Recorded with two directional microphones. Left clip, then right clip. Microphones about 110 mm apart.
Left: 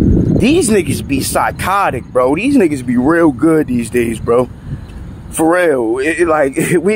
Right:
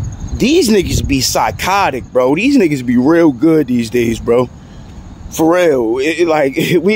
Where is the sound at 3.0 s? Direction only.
15° right (ahead or behind); by 6.9 s 35° right (ahead or behind).